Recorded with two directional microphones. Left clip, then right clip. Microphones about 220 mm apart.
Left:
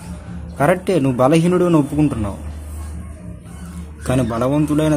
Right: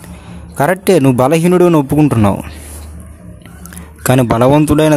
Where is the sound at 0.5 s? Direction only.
45° right (ahead or behind).